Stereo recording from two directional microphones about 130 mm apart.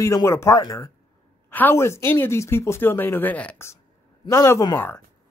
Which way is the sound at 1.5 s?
15° left (ahead or behind).